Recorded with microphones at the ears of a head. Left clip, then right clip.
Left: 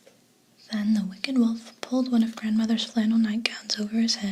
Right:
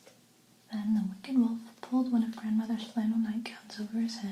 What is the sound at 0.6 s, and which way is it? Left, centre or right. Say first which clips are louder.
Speech: left 6 dB; left.